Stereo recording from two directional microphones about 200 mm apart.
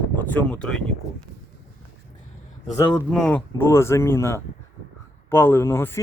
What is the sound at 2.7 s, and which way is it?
A man's voice, 5° left (ahead or behind).